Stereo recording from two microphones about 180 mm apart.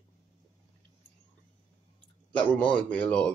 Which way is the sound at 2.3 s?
5° left (ahead or behind).